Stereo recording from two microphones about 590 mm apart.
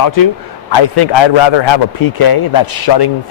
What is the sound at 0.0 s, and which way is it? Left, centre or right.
A man's voice, left.